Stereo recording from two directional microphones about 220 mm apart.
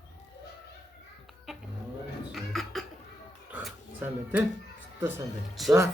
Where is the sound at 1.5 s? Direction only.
Centre (ahead or behind).